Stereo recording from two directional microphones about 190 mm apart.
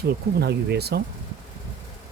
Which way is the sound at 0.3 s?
60° right (ahead or behind).